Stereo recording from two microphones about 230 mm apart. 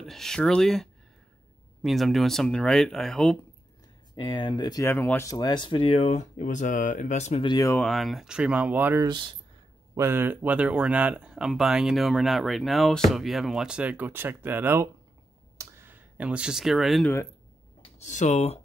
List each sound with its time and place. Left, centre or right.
0.0 s speech: centre
4.1 s speech: centre
15.5 s a sound: centre
17.8 s speech: left